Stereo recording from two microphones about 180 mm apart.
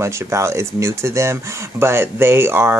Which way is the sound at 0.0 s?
15° right (ahead or behind).